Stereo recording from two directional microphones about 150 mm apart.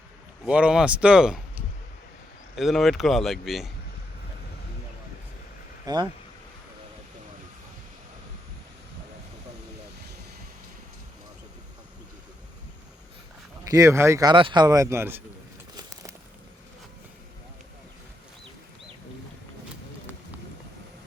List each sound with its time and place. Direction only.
0.4 s speech: 10° right (ahead or behind)
2.6 s speech: centre (ahead or behind)
5.8 s speech: 25° right (ahead or behind)
13.7 s speech: 20° right (ahead or behind)
14.3 s speech: 30° right (ahead or behind); by 15.2 s 15° right (ahead or behind)